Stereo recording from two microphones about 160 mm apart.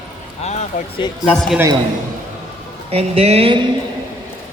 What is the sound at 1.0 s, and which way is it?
Speech, 25° left (ahead or behind).